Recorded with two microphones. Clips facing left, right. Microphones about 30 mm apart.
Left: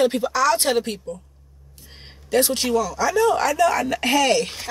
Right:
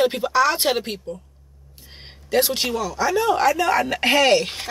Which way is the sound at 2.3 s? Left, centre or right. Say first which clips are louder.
Left 1 dB; centre.